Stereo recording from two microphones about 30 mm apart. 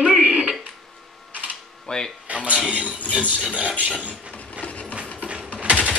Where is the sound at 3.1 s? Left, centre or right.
Right.